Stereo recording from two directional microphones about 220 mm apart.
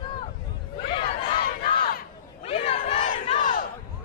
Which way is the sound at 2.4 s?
25° left (ahead or behind).